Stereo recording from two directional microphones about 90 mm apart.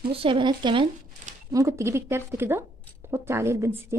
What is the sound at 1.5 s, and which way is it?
A woman's voice, 35° right (ahead or behind).